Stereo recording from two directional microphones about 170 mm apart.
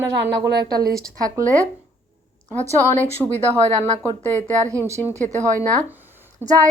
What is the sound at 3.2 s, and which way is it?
Speech, centre (ahead or behind).